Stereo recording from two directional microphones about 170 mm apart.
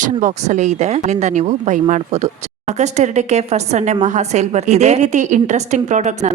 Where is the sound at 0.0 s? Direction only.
45° right (ahead or behind).